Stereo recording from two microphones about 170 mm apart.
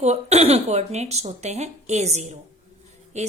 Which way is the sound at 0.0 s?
40° right (ahead or behind).